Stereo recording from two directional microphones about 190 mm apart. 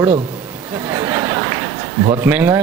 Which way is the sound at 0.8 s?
15° right (ahead or behind).